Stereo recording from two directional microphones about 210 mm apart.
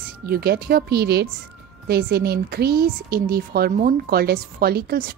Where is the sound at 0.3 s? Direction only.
45° right (ahead or behind).